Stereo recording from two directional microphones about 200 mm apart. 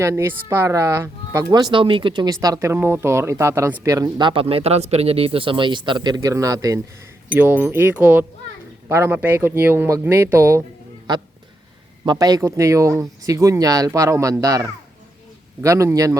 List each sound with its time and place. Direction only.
0.0 s speech: 15° right (ahead or behind)
12.0 s speech: 20° right (ahead or behind)